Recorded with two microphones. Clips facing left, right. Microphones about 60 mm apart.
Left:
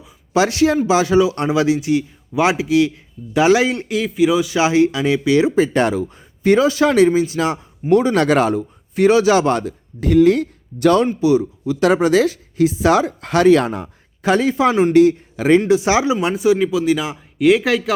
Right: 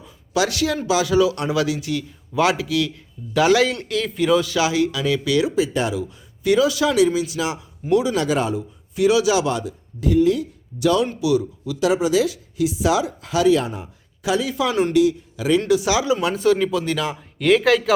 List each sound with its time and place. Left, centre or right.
0.3 s a man's voice: left; by 4.5 s centre
4.5 s a man's voice: left
5.5 s speech: left
11.2 s speech: left
11.8 s speech: left
14.2 s speech: left
14.5 s speech: left
14.9 s speech: left
15.6 s a man's voice: left
16.3 s speech: centre